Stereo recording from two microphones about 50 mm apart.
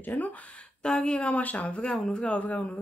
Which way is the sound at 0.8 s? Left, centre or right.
Centre.